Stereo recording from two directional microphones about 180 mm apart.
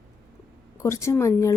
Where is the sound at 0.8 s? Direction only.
15° left (ahead or behind).